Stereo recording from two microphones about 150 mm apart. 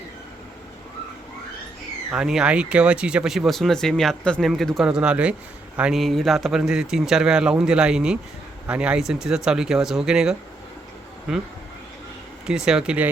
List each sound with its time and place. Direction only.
2.0 s speech: 5° right (ahead or behind)
12.5 s speech: 5° right (ahead or behind)